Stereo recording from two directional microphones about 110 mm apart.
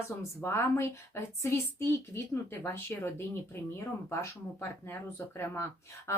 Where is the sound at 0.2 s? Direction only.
25° left (ahead or behind).